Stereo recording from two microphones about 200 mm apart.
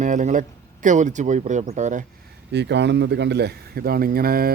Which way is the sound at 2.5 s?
60° right (ahead or behind).